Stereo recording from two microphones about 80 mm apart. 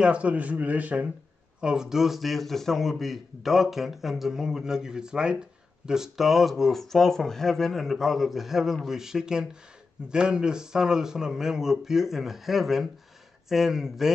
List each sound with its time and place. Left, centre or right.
0.0 s a man's voice: centre